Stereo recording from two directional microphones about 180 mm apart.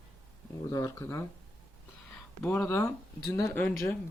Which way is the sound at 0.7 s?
20° left (ahead or behind).